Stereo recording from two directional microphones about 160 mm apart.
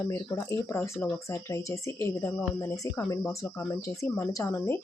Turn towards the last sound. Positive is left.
turn(degrees=15)  # may be behind; listen again after turning